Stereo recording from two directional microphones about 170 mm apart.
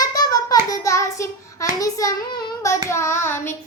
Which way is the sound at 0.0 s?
20° left (ahead or behind).